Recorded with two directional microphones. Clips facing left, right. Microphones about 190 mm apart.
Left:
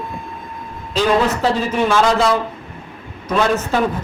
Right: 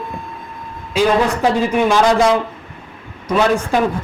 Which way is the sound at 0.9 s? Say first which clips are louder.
Right 1 dB; 10° right (ahead or behind).